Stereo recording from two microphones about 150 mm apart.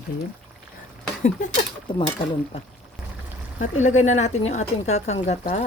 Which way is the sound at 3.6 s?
50° left (ahead or behind).